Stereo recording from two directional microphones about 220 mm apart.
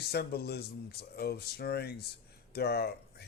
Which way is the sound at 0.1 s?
45° left (ahead or behind).